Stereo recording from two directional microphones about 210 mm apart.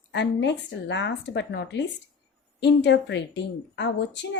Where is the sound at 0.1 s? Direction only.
55° left (ahead or behind).